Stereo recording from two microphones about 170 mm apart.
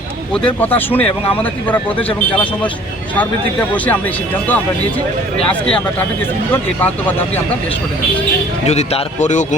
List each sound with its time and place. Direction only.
0.4 s speech: 10° left (ahead or behind)
6.5 s speech: 10° left (ahead or behind)
8.6 s speech: 40° left (ahead or behind)